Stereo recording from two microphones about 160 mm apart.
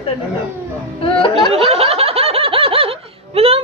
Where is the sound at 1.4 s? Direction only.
35° right (ahead or behind).